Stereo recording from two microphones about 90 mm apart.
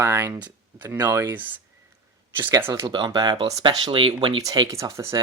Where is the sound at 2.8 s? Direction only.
55° right (ahead or behind).